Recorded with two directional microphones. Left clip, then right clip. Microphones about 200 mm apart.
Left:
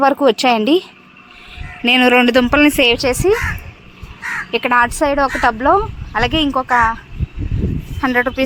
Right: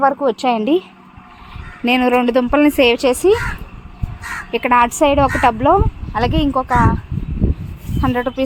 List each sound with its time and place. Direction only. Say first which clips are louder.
0.0 s speech: left 3 dB; 20° left (ahead or behind)
2.6 s a woman's voice: left 1 dB; 5° right (ahead or behind)
4.5 s a woman's voice: right 1 dB; 10° right (ahead or behind)
4.9 s speech: right 2 dB; 20° right (ahead or behind); by 6.9 s 5° right (ahead or behind)
8.0 s speech: left 3 dB; centre (ahead or behind)